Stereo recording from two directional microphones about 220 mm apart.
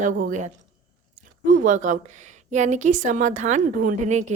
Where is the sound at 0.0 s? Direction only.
35° right (ahead or behind).